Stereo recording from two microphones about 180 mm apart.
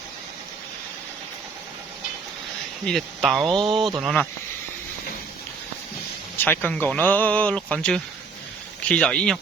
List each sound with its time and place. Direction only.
2.8 s speech: centre (ahead or behind)
3.4 s speech: 25° right (ahead or behind)
3.8 s speech: centre (ahead or behind)
6.3 s speech: 10° left (ahead or behind)